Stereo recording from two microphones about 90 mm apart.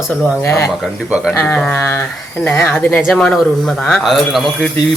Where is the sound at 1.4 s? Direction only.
15° left (ahead or behind).